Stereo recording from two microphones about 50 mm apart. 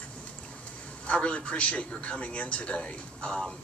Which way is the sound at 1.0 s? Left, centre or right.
Left.